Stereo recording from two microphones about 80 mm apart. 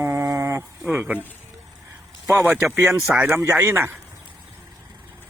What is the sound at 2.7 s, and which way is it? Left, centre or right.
Speech, right.